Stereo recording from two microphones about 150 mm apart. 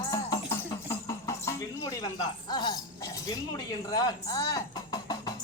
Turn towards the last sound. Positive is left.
turn(degrees=25)  # may be behind; listen again after turning